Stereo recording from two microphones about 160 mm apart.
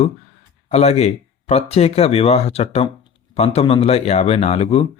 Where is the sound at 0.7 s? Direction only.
40° left (ahead or behind).